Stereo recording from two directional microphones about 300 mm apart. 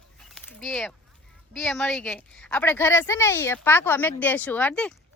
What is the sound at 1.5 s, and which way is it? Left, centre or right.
A woman's voice, centre.